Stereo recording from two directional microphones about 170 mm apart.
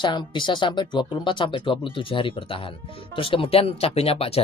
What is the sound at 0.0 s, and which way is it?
Speech, 25° left (ahead or behind).